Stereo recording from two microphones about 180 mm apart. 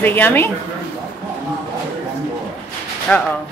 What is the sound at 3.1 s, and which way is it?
Speech, 5° left (ahead or behind).